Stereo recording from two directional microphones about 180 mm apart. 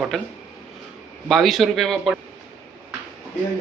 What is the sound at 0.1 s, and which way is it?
Speech, centre (ahead or behind).